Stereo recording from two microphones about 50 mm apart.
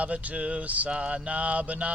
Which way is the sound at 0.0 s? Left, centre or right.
Right.